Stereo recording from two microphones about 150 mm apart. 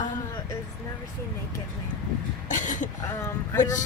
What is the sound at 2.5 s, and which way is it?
Speech, 55° left (ahead or behind).